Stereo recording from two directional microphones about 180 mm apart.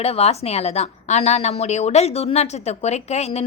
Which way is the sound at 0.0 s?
35° left (ahead or behind).